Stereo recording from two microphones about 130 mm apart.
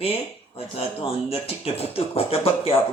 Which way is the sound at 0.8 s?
50° left (ahead or behind).